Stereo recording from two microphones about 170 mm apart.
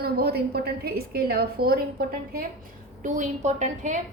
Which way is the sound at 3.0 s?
45° right (ahead or behind).